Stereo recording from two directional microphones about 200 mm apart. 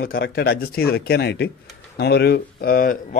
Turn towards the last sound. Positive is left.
turn(degrees=45)  # may be behind; listen again after turning